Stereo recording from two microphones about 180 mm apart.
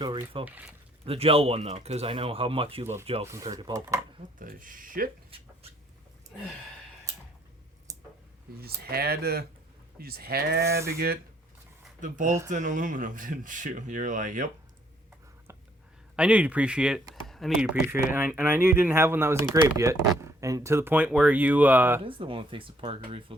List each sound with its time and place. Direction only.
0.4 s speech: 10° right (ahead or behind)
1.0 s speech: 30° right (ahead or behind)
3.3 s speech: 20° right (ahead or behind)
4.4 s speech: 50° right (ahead or behind)
7.9 s clicking: 20° right (ahead or behind)
8.5 s speech: 60° right (ahead or behind)
11.9 s speech: 45° right (ahead or behind)
16.1 s speech: 5° right (ahead or behind)
22.0 s speech: 30° right (ahead or behind)